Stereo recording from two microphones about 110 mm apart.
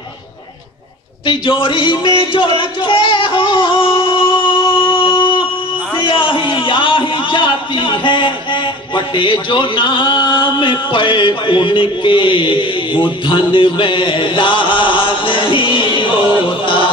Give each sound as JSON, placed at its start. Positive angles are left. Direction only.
{"t": 1.2, "sound": "a man's voice", "side_deg": 50}
{"t": 2.3, "sound": "singing", "side_deg": 50}
{"t": 5.9, "sound": "a sound", "side_deg": 50}